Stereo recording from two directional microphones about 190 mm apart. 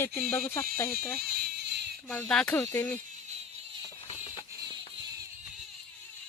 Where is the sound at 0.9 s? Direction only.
55° right (ahead or behind).